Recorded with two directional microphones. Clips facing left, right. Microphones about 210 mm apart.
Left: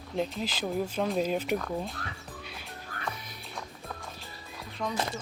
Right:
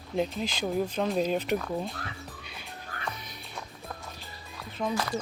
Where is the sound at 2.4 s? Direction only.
Centre (ahead or behind).